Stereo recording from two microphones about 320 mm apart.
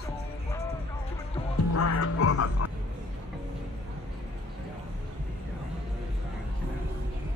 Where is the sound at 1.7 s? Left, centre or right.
Left.